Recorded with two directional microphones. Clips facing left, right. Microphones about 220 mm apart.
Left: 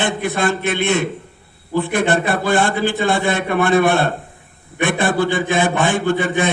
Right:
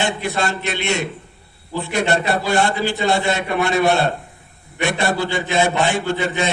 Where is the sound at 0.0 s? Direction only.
50° left (ahead or behind).